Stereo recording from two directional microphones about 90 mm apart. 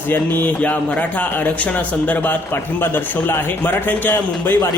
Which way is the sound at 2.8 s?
25° left (ahead or behind).